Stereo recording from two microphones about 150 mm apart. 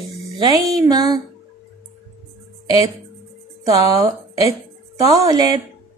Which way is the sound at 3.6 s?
25° right (ahead or behind).